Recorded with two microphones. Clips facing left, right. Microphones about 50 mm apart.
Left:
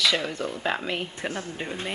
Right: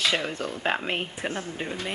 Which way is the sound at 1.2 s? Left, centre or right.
Centre.